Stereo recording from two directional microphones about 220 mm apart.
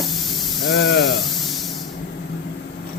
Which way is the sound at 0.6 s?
50° left (ahead or behind).